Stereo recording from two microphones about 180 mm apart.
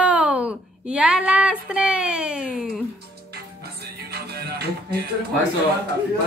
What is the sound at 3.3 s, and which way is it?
Music, 60° right (ahead or behind).